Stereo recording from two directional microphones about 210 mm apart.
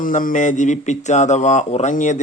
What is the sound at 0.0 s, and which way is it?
Speech, 40° left (ahead or behind).